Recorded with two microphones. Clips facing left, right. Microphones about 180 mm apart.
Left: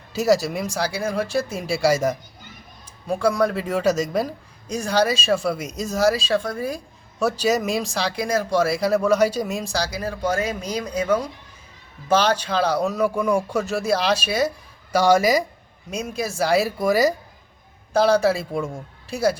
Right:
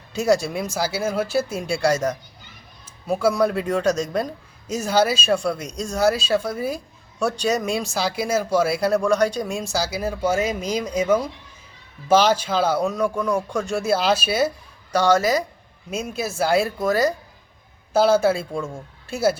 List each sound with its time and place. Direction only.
0.1 s speech: centre (ahead or behind)
3.1 s speech: 5° right (ahead or behind)
14.9 s speech: 10° left (ahead or behind)
15.9 s speech: centre (ahead or behind)
16.7 s speech: 10° left (ahead or behind)
17.9 s speech: 5° right (ahead or behind)